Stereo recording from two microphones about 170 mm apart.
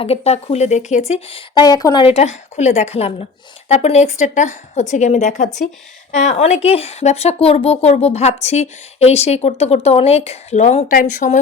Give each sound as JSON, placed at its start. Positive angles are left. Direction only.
{"t": 0.0, "sound": "a woman's voice", "side_deg": 35}